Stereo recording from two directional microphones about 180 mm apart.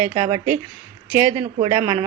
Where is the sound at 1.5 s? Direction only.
30° right (ahead or behind).